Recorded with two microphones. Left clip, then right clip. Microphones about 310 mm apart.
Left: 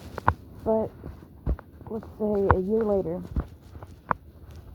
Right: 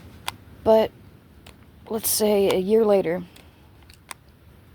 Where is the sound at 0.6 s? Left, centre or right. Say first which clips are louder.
Right 8 dB; right.